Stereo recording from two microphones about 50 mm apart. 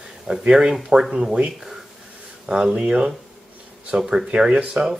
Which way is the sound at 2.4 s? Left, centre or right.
Right.